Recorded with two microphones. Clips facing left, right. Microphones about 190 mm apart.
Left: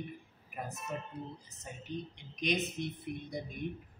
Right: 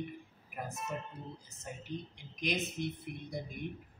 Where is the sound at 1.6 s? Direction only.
Centre (ahead or behind).